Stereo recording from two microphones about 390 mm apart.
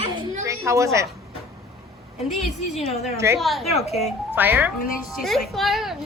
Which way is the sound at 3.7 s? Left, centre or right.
Centre.